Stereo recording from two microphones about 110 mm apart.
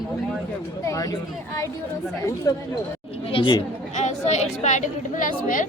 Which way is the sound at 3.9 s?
90° left.